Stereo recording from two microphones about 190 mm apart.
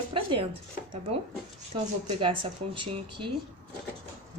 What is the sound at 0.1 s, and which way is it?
Speech, 25° right (ahead or behind).